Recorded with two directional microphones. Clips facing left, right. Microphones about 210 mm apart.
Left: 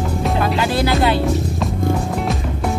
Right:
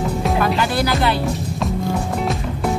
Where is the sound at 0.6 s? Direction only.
25° left (ahead or behind).